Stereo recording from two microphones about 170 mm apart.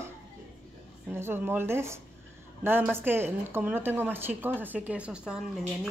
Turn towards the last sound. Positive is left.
turn(degrees=-5)  # may be behind; listen again after turning